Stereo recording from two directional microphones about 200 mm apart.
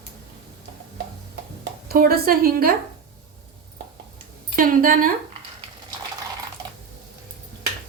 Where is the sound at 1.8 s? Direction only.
50° right (ahead or behind).